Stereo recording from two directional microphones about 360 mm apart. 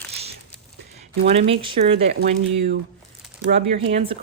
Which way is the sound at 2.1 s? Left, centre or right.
Right.